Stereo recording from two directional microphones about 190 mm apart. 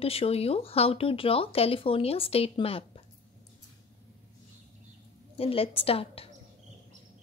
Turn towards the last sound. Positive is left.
turn(degrees=30)  # may be behind; listen again after turning